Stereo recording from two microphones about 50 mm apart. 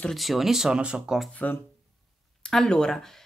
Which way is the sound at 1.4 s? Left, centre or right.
Left.